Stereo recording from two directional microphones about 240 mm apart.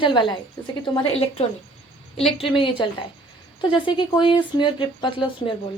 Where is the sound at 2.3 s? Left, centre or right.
Left.